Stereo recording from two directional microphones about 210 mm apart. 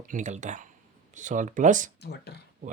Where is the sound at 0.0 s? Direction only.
35° right (ahead or behind).